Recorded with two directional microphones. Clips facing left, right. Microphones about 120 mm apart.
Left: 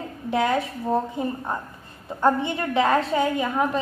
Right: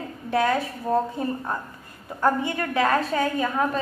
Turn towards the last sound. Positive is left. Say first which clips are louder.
# left 1 dB
turn(degrees=15)  # may be behind; listen again after turning